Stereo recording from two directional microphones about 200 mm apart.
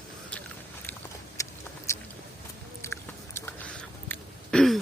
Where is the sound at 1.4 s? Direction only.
15° left (ahead or behind).